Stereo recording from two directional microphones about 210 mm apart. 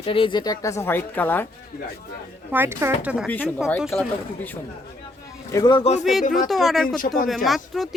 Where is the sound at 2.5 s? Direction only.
10° right (ahead or behind).